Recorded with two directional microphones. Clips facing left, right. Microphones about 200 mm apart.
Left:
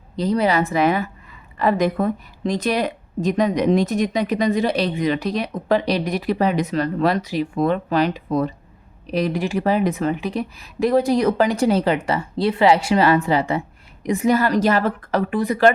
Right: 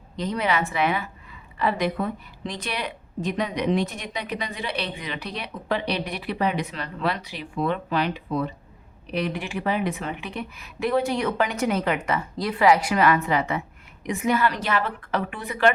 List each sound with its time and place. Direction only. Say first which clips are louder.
0.2 s speech: left 6 dB; 35° left (ahead or behind)